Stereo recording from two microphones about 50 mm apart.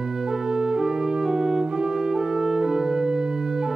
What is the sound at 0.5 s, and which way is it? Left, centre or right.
Music, centre.